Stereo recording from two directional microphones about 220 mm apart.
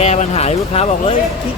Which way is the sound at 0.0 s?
30° left (ahead or behind).